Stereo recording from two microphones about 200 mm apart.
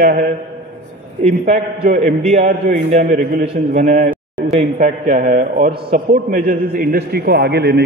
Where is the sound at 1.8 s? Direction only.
35° right (ahead or behind).